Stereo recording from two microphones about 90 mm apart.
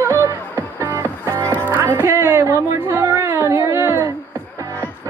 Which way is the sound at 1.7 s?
20° right (ahead or behind).